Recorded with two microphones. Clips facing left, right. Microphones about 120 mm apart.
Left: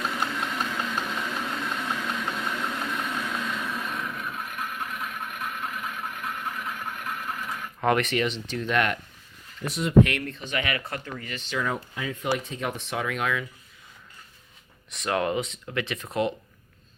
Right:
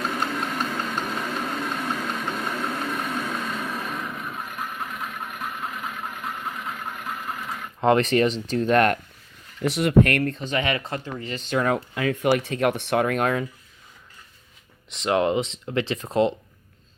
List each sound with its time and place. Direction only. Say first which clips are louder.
0.1 s engine: right 3 dB; 45° right (ahead or behind)
7.8 s speech: right 5 dB; 30° right (ahead or behind)
9.6 s speech: right 6 dB; 80° right
10.0 s speech: even; 50° right (ahead or behind); by 11.3 s 25° right (ahead or behind)
11.3 s speech: right 7 dB; 50° right (ahead or behind)
14.9 s speech: right 5 dB; 25° right (ahead or behind)